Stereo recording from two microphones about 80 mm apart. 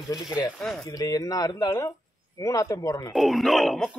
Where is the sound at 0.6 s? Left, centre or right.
Centre.